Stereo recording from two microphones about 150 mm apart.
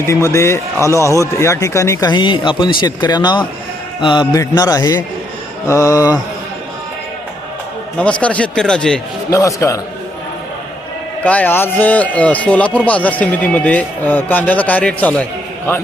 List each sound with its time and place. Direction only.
0.3 s a man's voice: 15° left (ahead or behind)
8.2 s speech: 10° left (ahead or behind)
9.3 s a man's voice: 20° left (ahead or behind)
11.2 s a man's voice: 10° left (ahead or behind)